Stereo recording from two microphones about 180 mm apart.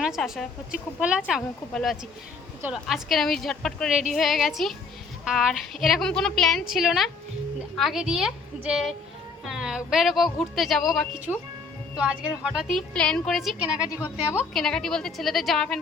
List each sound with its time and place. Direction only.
0.0 s a woman's voice: centre (ahead or behind)
12.4 s a woman's voice: 5° right (ahead or behind)